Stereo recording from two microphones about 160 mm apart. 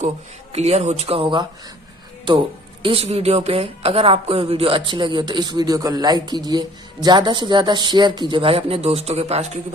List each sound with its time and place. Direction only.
0.5 s speech: 40° right (ahead or behind)
2.8 s speech: 35° right (ahead or behind)